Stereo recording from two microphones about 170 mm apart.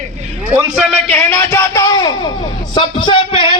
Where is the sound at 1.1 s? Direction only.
15° left (ahead or behind).